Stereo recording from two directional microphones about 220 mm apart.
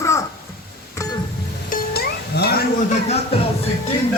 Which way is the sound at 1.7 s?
45° left (ahead or behind).